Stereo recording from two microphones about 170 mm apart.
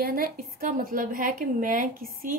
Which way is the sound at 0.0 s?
55° right (ahead or behind).